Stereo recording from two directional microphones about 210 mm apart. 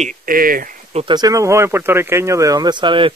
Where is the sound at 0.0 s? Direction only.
40° right (ahead or behind).